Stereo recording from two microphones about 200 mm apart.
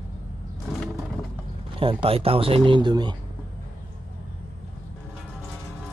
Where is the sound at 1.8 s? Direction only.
25° right (ahead or behind).